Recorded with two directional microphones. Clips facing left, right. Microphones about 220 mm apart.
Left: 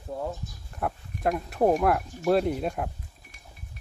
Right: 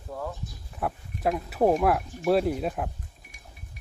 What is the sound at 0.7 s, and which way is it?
Speech, centre (ahead or behind).